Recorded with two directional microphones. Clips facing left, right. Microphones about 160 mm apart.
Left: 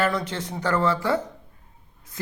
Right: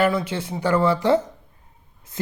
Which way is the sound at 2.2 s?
25° right (ahead or behind).